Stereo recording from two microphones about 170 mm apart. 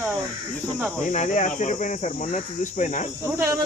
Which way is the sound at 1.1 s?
45° left (ahead or behind).